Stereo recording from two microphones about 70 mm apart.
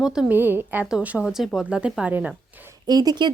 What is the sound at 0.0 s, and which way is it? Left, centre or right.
Speech, centre.